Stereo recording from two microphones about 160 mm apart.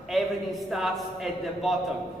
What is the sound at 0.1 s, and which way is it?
A man's voice, centre (ahead or behind).